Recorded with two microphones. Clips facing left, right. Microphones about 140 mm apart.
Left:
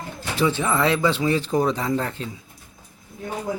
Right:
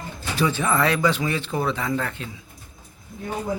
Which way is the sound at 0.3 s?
25° left (ahead or behind).